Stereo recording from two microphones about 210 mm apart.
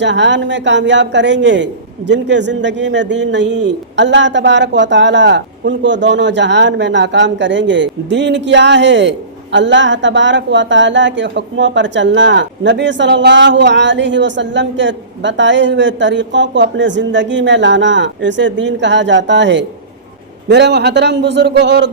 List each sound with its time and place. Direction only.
0.0 s a woman's voice: 60° right (ahead or behind)